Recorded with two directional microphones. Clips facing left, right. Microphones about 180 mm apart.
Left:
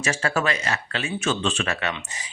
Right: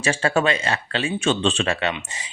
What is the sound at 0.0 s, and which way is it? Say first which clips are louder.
Speech: right 4 dB; 30° right (ahead or behind).